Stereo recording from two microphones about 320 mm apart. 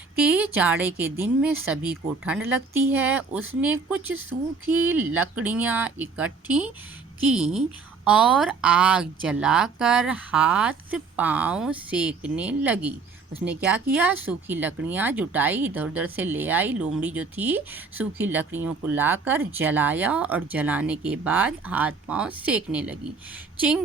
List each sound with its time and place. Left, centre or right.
0.2 s speech: centre